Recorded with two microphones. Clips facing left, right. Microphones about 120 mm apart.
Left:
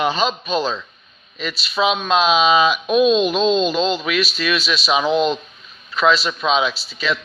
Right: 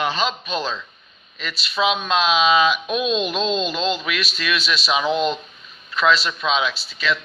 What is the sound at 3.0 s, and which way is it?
Speech, 35° left (ahead or behind).